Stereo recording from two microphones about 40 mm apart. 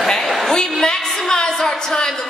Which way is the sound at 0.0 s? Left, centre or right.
Centre.